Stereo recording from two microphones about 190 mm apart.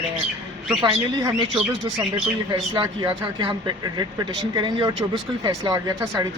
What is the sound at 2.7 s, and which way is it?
Speech, 25° right (ahead or behind).